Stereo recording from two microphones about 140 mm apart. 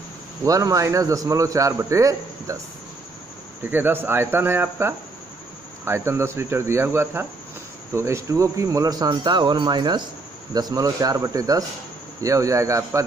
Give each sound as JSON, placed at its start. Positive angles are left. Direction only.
{"t": 0.5, "sound": "a man's voice", "side_deg": -25}
{"t": 3.6, "sound": "a man's voice", "side_deg": -15}